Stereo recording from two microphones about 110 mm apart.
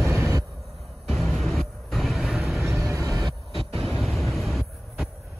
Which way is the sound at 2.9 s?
30° right (ahead or behind).